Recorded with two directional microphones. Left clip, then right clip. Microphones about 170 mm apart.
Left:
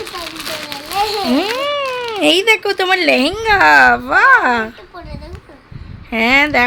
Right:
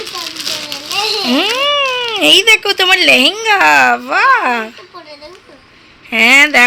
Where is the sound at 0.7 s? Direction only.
30° left (ahead or behind).